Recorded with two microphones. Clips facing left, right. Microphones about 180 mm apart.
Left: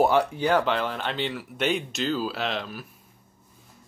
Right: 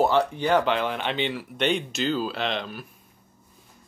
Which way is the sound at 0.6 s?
10° right (ahead or behind).